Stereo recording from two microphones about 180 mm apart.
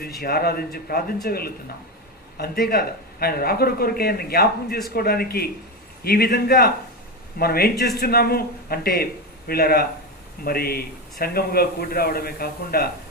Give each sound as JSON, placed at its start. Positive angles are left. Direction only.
{"t": 0.2, "sound": "speech", "side_deg": 60}